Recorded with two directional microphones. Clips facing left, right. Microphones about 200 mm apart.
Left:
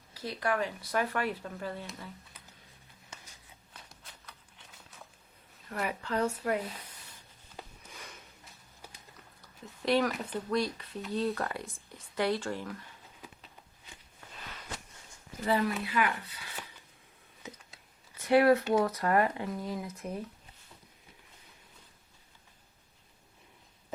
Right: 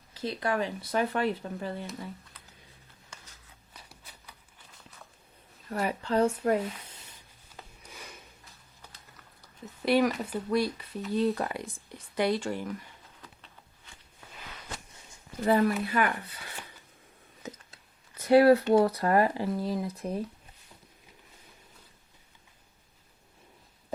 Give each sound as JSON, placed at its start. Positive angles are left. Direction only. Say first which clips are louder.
{"t": 0.1, "sound": "speech", "louder": "right 2 dB", "side_deg": -25}
{"t": 4.0, "sound": "a sound", "louder": "even", "side_deg": -5}
{"t": 5.7, "sound": "speech", "louder": "right 5 dB", "side_deg": -35}
{"t": 9.8, "sound": "speech", "louder": "right 3 dB", "side_deg": -10}
{"t": 15.4, "sound": "speech", "louder": "right 5 dB", "side_deg": -45}
{"t": 18.2, "sound": "speech", "louder": "right 4 dB", "side_deg": -35}